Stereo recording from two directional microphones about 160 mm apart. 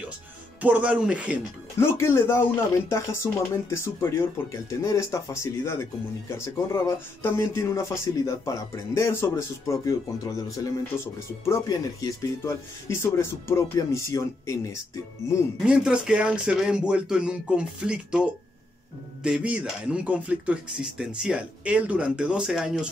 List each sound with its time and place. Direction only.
0.6 s speech: 10° right (ahead or behind)
1.8 s a man's voice: 15° left (ahead or behind)
15.6 s speech: 5° right (ahead or behind)